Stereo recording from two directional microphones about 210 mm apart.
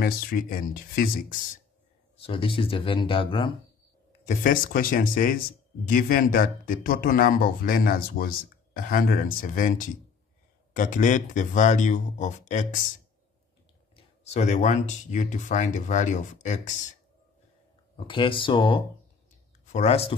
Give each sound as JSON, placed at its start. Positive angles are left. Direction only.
{"t": 0.0, "sound": "speech", "side_deg": 40}
{"t": 2.2, "sound": "speech", "side_deg": 25}
{"t": 4.3, "sound": "speech", "side_deg": 40}
{"t": 13.9, "sound": "speech", "side_deg": 30}
{"t": 17.9, "sound": "speech", "side_deg": 25}